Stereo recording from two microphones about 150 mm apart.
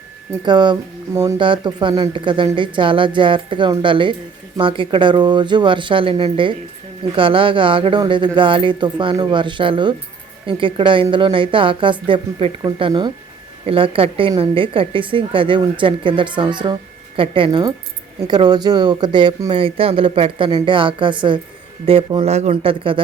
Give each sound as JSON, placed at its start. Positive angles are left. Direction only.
{"t": 0.4, "sound": "a woman's voice", "side_deg": -30}